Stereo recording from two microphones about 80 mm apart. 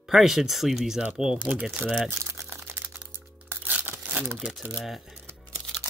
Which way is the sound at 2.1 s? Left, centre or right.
Right.